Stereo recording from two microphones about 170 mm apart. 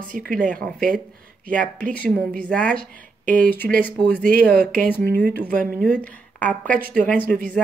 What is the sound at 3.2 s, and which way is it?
Speech, 55° right (ahead or behind).